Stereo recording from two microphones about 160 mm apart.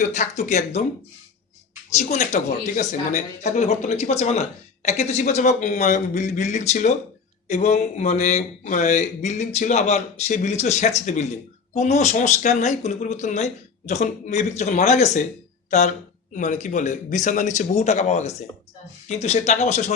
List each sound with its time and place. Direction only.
0.0 s speech: 50° left (ahead or behind)
2.0 s speech: 45° left (ahead or behind)
16.3 s speech: 50° left (ahead or behind)